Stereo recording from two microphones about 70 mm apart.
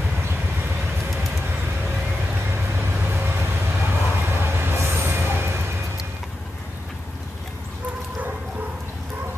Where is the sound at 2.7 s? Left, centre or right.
Right.